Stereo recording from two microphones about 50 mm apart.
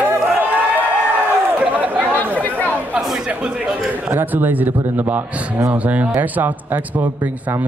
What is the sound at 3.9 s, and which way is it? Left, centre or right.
A man's voice, right.